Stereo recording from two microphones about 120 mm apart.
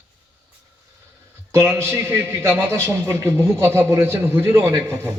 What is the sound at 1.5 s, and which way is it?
A man's voice, 20° right (ahead or behind).